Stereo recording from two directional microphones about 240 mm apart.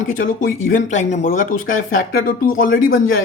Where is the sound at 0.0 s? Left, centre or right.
Left.